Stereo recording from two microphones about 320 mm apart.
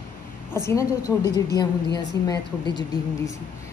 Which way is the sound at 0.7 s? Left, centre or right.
Centre.